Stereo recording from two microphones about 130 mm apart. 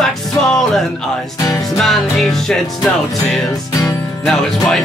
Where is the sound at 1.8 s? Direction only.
Centre (ahead or behind).